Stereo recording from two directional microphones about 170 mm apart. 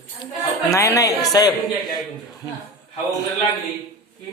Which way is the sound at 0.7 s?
20° left (ahead or behind).